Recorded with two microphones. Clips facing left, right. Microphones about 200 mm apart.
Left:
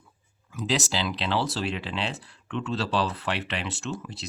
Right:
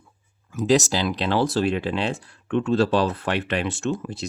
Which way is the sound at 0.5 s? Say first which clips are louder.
Right 8 dB; 45° right (ahead or behind).